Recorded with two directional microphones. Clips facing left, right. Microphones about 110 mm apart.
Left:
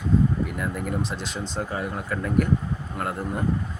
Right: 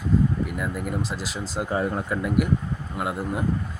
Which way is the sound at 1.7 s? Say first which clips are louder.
Right 8 dB; 25° right (ahead or behind).